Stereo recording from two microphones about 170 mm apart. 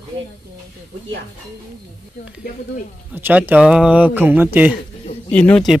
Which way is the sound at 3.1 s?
10° right (ahead or behind).